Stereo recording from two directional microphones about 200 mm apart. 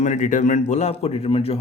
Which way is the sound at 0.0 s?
35° left (ahead or behind).